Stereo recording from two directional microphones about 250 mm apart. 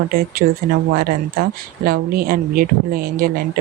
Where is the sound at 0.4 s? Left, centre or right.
Right.